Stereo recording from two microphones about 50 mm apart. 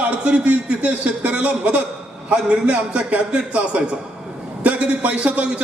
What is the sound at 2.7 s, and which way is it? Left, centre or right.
A man's voice, right.